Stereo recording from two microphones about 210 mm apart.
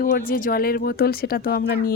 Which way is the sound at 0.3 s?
40° left (ahead or behind).